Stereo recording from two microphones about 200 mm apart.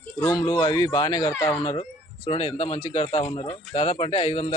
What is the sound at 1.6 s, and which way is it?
Speech, 25° left (ahead or behind).